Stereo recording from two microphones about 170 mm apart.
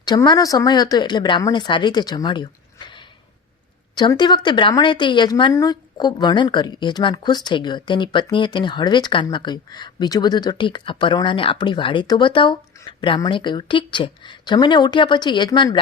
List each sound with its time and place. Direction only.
0.0 s speech: 25° left (ahead or behind)
3.9 s speech: 25° left (ahead or behind)